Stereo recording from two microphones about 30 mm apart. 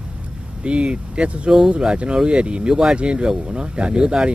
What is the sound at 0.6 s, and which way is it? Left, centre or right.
Speech, right.